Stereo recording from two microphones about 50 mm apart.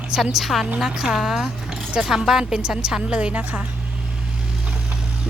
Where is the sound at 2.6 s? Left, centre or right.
Right.